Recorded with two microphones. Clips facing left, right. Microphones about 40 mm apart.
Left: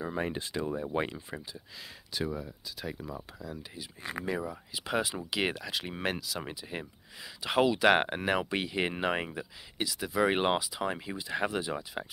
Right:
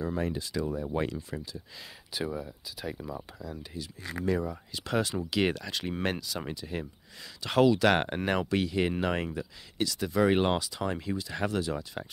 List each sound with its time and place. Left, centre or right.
0.0 s speech: left
2.1 s speech: centre
3.8 s speech: centre
6.5 s speech: centre
8.5 s speech: centre